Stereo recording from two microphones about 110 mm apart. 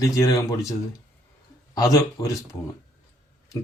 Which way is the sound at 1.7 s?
30° left (ahead or behind).